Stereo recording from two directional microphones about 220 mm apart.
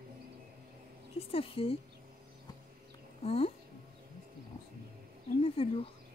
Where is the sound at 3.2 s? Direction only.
25° left (ahead or behind).